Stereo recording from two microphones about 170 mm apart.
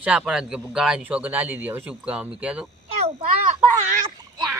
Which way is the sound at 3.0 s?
35° right (ahead or behind).